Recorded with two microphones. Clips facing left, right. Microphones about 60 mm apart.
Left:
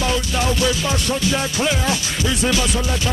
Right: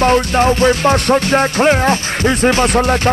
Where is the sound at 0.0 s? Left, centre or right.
Right.